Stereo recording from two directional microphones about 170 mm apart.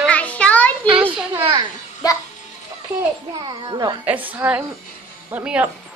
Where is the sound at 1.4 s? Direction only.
25° right (ahead or behind).